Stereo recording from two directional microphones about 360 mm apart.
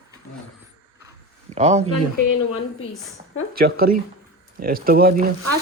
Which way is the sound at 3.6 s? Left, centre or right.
Right.